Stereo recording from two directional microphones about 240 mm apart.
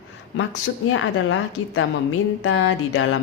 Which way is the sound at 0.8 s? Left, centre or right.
Left.